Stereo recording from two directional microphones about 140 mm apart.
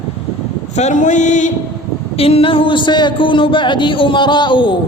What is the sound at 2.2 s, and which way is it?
A man's voice, 45° left (ahead or behind).